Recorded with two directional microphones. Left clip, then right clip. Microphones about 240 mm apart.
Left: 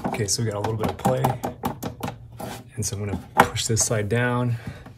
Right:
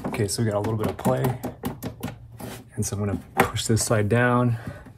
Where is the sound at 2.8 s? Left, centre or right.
Centre.